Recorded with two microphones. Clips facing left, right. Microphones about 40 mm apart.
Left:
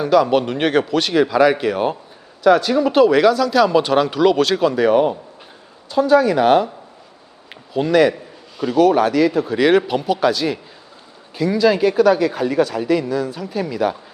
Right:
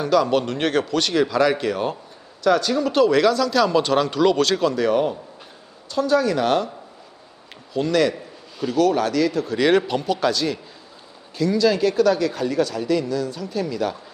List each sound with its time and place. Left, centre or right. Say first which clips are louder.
0.0 s speech: left 4 dB; centre
7.7 s speech: left 5 dB; centre